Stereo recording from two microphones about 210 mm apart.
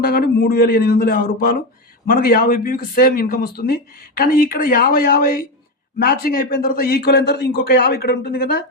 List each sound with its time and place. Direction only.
0.0 s speech: 45° left (ahead or behind)